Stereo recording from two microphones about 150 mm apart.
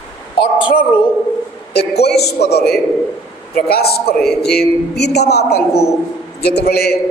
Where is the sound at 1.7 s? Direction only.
90° left.